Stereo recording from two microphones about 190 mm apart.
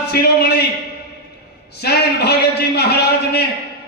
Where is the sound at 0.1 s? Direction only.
55° left (ahead or behind).